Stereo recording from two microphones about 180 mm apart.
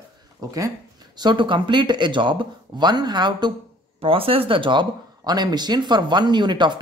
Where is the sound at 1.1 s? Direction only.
25° right (ahead or behind).